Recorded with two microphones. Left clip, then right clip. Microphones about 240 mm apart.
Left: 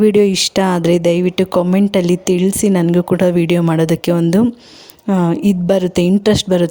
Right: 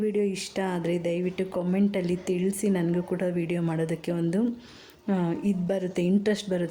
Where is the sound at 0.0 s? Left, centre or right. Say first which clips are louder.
Left 16 dB; left.